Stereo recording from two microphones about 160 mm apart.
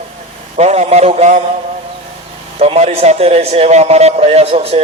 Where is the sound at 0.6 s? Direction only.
45° right (ahead or behind).